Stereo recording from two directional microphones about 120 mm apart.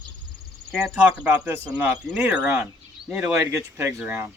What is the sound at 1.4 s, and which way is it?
Speech, 10° right (ahead or behind).